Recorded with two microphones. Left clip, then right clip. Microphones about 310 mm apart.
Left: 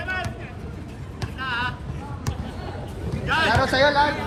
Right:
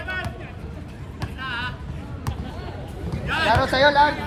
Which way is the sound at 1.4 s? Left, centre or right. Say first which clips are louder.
Left 3 dB; centre.